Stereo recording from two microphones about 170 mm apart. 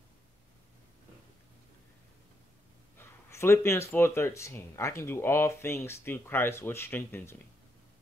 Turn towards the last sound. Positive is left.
turn(degrees=15)  # may be behind; listen again after turning